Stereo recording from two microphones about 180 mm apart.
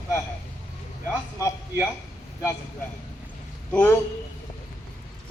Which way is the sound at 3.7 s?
10° left (ahead or behind).